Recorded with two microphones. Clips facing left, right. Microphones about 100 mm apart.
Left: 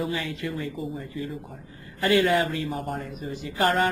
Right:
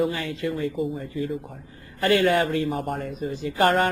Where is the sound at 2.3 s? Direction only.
40° right (ahead or behind).